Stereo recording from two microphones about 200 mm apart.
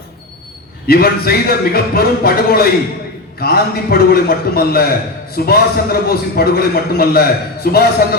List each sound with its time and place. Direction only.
0.9 s a man's voice: 50° left (ahead or behind)